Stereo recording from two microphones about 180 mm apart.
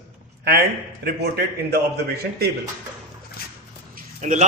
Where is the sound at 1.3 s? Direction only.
60° right (ahead or behind).